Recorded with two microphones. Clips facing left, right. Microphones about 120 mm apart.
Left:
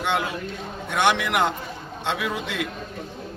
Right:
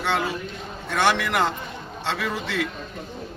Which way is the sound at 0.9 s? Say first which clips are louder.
Even; 20° left (ahead or behind).